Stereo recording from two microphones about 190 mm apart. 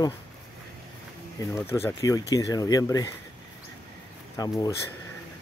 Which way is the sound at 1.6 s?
15° left (ahead or behind).